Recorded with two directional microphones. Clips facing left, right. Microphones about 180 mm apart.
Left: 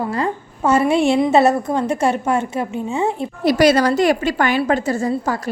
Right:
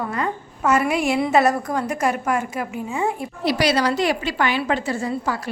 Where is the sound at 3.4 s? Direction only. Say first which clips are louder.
Left 6 dB; 45° left (ahead or behind).